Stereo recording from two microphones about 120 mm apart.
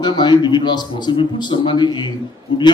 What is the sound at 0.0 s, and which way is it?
A man's voice, 40° left (ahead or behind).